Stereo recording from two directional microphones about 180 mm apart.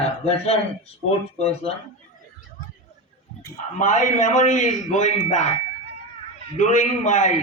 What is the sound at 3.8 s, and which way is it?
A man's voice, 45° left (ahead or behind).